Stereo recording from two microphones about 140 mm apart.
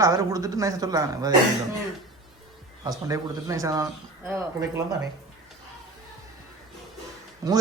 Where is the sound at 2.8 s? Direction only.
25° right (ahead or behind).